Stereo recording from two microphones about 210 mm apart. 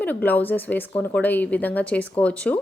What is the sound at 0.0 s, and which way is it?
A woman's voice, 10° left (ahead or behind).